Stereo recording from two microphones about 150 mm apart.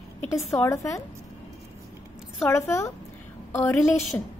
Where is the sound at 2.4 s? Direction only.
15° left (ahead or behind).